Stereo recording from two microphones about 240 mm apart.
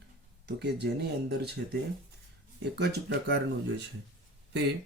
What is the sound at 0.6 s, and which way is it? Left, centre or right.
Speech, right.